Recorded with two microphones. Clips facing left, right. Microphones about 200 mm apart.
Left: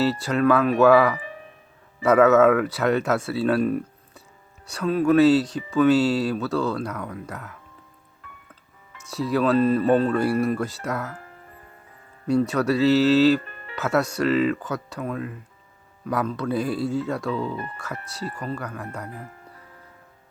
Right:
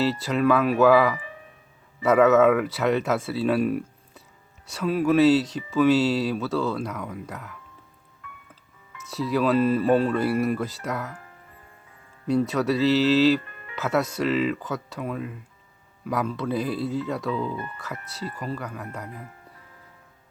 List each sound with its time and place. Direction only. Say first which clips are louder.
0.0 s speech: left 2 dB; centre (ahead or behind)
9.0 s speech: left 1 dB; centre (ahead or behind)
12.3 s speech: left 2 dB; centre (ahead or behind)
13.4 s music: left 3 dB; 35° left (ahead or behind)
13.7 s speech: left 2 dB; centre (ahead or behind)
17.5 s speech: left 1 dB; 30° left (ahead or behind)
17.7 s speech: left 2 dB; centre (ahead or behind)